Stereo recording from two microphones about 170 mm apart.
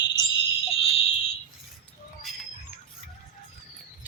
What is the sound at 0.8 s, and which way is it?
Fire alarm, 35° left (ahead or behind).